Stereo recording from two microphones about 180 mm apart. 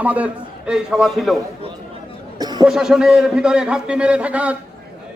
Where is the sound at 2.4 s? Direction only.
25° right (ahead or behind).